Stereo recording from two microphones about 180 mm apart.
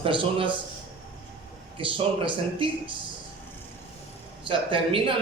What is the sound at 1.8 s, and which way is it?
Speech, 30° right (ahead or behind).